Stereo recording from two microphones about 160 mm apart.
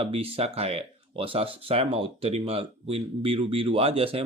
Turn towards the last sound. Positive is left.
turn(degrees=-35)  # may be behind; listen again after turning